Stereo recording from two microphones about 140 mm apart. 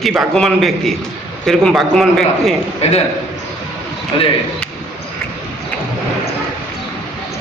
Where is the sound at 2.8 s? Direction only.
50° left (ahead or behind).